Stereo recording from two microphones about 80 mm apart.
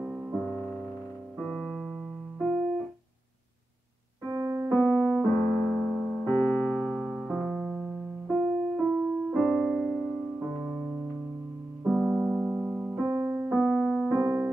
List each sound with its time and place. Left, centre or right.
0.0 s music: centre
0.4 s music: centre
1.4 s keyboard: centre
2.3 s music: centre
4.3 s keyboard: right
4.6 s piano: centre
6.2 s keyboard: centre
7.4 s keyboard: centre
8.3 s music: centre
10.6 s keyboard: centre
11.8 s piano: centre
13.0 s music: right
13.5 s keyboard: centre
14.1 s keyboard: right